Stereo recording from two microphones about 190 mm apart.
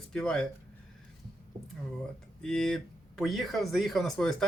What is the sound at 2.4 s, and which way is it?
Speech, 5° left (ahead or behind).